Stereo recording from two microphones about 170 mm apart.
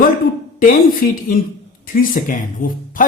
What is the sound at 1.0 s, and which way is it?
Speech, 65° left (ahead or behind).